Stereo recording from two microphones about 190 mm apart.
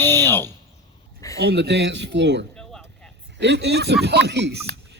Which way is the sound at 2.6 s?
5° left (ahead or behind).